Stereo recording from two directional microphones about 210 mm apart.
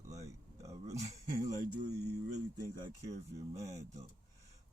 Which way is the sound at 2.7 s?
20° right (ahead or behind).